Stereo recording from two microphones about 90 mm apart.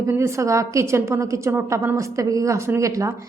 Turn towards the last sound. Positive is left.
turn(degrees=-35)  # may be behind; listen again after turning